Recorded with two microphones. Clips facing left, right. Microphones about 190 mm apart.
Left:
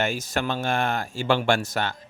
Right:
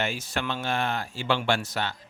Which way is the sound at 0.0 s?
45° left (ahead or behind).